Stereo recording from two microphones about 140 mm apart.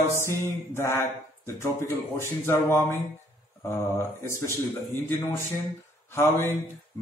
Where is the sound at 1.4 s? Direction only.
20° left (ahead or behind).